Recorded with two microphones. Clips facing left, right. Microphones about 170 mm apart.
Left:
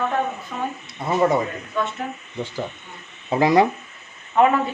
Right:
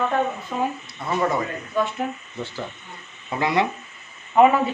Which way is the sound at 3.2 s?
30° left (ahead or behind).